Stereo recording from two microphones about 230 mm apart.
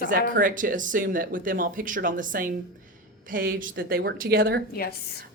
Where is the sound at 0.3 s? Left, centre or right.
Right.